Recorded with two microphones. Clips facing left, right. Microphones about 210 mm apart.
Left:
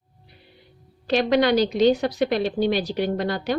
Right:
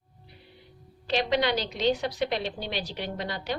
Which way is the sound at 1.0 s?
50° left (ahead or behind).